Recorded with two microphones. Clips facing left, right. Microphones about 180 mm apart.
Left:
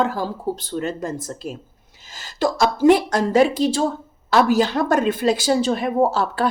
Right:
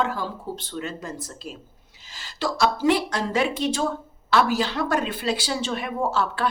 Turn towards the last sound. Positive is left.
turn(degrees=40)  # may be behind; listen again after turning